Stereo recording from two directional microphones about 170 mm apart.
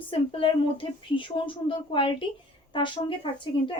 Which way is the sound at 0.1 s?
30° left (ahead or behind).